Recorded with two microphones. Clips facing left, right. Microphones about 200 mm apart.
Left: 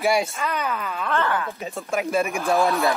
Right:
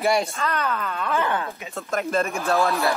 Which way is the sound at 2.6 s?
Centre (ahead or behind).